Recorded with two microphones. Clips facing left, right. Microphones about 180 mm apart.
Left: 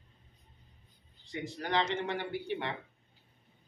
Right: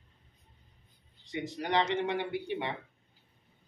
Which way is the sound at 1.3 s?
20° right (ahead or behind).